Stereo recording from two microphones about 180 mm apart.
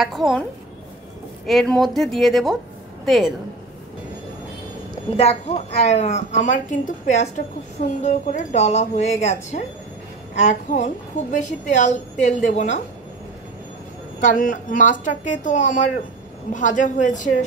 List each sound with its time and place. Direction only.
0.0 s a woman's voice: centre (ahead or behind)
5.1 s a woman's voice: 35° left (ahead or behind)
14.2 s speech: 50° left (ahead or behind)